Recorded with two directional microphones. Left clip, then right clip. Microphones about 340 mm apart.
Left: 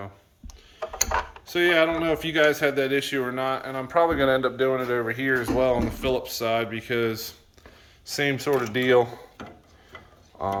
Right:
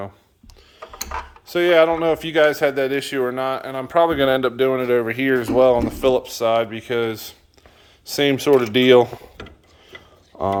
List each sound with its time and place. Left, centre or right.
1.5 s speech: centre
8.0 s speech: centre
10.3 s a sound: right